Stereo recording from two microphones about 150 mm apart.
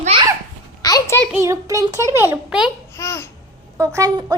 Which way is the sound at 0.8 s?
25° left (ahead or behind).